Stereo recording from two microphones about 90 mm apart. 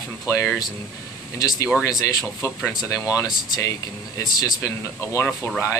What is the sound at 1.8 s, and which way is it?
Speech, 40° left (ahead or behind).